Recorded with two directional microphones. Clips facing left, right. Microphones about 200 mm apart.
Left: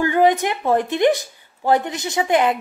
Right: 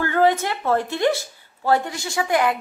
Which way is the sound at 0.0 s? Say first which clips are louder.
Left 3 dB; 15° left (ahead or behind).